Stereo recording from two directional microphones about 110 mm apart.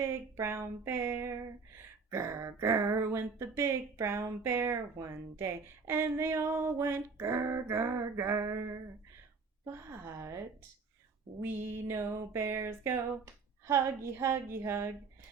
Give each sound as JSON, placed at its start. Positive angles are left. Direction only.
{"t": 0.0, "sound": "speech", "side_deg": -20}
{"t": 11.4, "sound": "speech", "side_deg": -20}